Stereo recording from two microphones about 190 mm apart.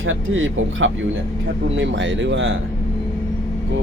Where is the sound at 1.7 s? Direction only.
75° right (ahead or behind).